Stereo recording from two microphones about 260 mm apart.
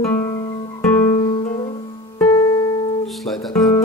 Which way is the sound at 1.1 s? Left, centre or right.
Centre.